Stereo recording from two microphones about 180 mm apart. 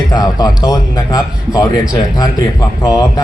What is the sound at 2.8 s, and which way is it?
Speech, 20° left (ahead or behind).